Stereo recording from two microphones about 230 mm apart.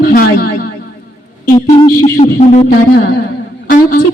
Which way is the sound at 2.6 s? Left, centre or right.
Left.